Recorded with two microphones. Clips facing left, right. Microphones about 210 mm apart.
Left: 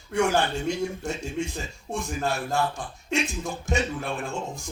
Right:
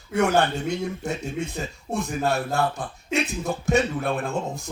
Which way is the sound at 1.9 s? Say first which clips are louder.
Right 4 dB; 60° right (ahead or behind).